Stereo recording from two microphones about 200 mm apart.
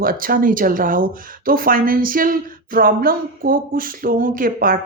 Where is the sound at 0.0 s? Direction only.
45° right (ahead or behind).